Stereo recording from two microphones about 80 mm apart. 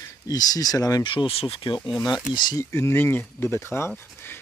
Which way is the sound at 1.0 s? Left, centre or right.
Left.